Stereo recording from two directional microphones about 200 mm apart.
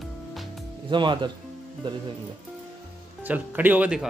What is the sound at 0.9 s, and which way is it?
Speech, 25° right (ahead or behind).